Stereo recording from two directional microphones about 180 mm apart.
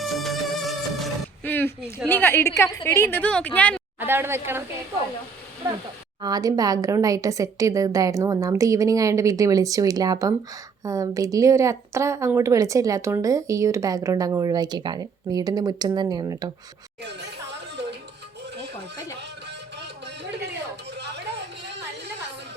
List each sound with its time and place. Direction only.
0.0 s music: centre (ahead or behind)
1.5 s a sound: 10° left (ahead or behind)
2.0 s a woman's voice: 10° left (ahead or behind)
4.0 s a woman's voice: 10° right (ahead or behind)
6.2 s speech: 20° right (ahead or behind)